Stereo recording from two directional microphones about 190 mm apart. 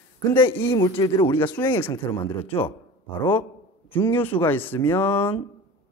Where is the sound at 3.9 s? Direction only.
10° left (ahead or behind).